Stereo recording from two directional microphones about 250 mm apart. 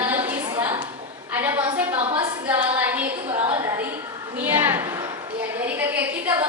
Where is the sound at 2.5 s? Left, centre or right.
Centre.